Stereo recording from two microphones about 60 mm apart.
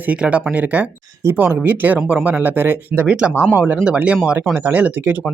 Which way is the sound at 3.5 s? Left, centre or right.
Right.